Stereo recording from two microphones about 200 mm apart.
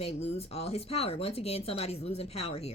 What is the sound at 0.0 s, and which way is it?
Speech, 30° left (ahead or behind).